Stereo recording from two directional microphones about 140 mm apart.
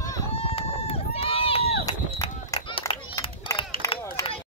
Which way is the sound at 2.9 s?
40° left (ahead or behind).